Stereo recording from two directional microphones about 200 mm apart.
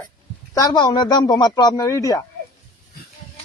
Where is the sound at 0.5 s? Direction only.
20° left (ahead or behind).